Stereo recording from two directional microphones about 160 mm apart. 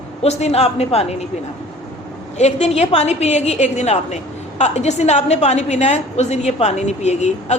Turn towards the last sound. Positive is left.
turn(degrees=45)  # may be behind; listen again after turning